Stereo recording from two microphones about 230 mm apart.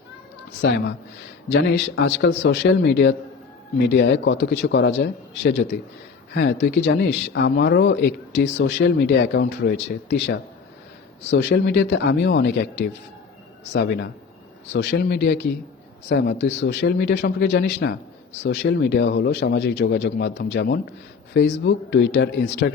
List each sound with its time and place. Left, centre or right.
0.6 s speech: left